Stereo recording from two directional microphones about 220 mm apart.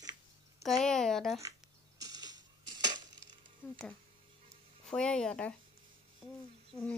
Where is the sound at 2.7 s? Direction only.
20° right (ahead or behind).